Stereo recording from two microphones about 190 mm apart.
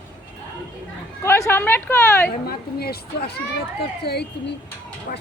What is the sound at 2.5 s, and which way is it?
Speech, 55° left (ahead or behind).